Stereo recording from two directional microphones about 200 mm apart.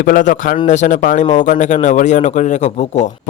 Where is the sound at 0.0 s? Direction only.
40° left (ahead or behind).